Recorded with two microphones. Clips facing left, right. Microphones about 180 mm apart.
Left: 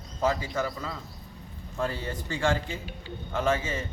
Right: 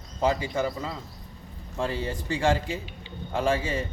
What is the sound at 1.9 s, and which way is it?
Speech, 5° right (ahead or behind).